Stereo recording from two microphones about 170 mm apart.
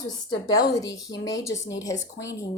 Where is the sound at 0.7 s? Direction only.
20° left (ahead or behind).